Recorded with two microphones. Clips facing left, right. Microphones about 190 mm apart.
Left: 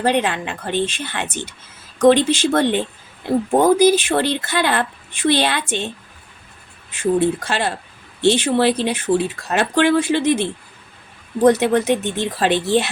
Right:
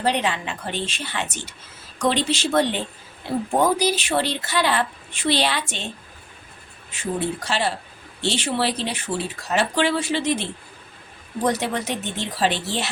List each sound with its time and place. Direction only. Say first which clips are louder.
0.0 s a woman's voice: left 4 dB; 55° left (ahead or behind)
3.8 s a woman's voice: left 8 dB; 55° left (ahead or behind)
7.0 s a woman's voice: left 8 dB; 55° left (ahead or behind)